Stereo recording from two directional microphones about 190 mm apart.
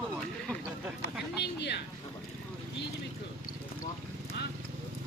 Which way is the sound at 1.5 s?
60° left (ahead or behind).